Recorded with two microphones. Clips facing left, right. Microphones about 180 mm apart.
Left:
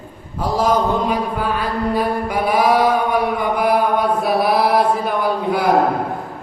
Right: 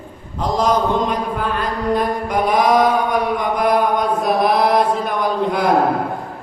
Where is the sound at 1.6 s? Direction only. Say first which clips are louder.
Right 2 dB; 5° left (ahead or behind).